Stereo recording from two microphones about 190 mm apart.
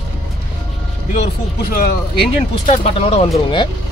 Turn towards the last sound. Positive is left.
turn(degrees=30)  # may be behind; listen again after turning